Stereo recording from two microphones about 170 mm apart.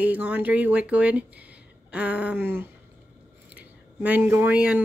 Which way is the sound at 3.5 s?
10° right (ahead or behind).